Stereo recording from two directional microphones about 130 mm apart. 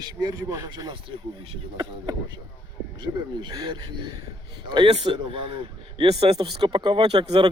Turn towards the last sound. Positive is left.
turn(degrees=-40)  # may be behind; listen again after turning